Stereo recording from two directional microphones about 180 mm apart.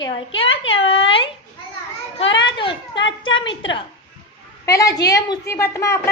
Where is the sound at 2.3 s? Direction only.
25° left (ahead or behind).